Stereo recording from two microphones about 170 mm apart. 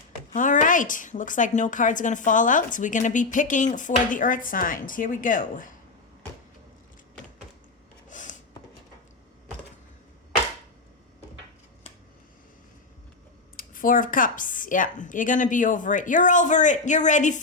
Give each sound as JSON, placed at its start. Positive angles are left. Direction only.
{"t": 0.3, "sound": "a woman's voice", "side_deg": 50}
{"t": 8.1, "sound": "a sound", "side_deg": 50}
{"t": 13.6, "sound": "a woman's voice", "side_deg": 55}